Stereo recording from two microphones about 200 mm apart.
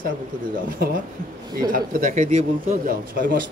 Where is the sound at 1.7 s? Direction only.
45° right (ahead or behind).